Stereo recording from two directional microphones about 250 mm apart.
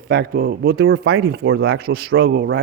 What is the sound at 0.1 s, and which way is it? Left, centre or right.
Speech, right.